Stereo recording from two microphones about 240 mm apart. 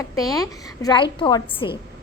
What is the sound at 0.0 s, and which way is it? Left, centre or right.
A woman's voice, centre.